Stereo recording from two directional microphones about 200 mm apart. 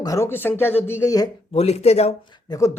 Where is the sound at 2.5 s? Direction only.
20° left (ahead or behind).